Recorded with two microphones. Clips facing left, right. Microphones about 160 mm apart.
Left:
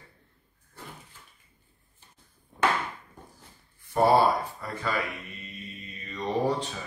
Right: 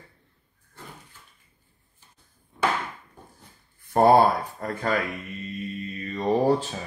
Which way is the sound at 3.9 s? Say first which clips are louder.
Right 4 dB; 50° right (ahead or behind).